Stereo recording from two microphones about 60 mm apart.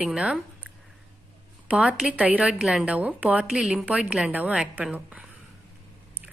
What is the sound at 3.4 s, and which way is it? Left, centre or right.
A woman's voice, centre.